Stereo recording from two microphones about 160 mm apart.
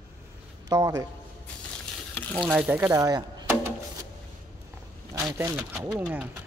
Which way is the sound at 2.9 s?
25° right (ahead or behind).